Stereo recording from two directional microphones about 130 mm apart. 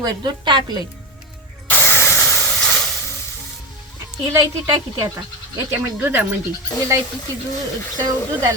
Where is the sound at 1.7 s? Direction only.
15° left (ahead or behind).